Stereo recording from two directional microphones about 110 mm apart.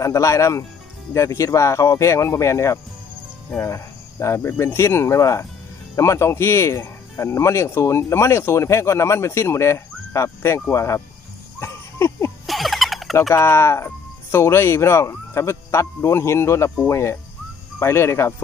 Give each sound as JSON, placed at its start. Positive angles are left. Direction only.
{"t": 0.0, "sound": "speech", "side_deg": 30}
{"t": 11.6, "sound": "a sound", "side_deg": 25}
{"t": 12.4, "sound": "turkey", "side_deg": 0}
{"t": 13.3, "sound": "speech", "side_deg": 25}